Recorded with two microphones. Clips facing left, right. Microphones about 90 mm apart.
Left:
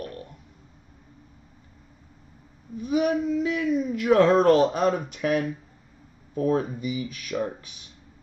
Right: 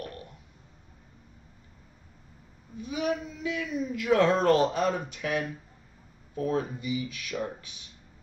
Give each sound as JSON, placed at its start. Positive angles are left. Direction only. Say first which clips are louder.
{"t": 2.8, "sound": "speech", "louder": "left 7 dB", "side_deg": 55}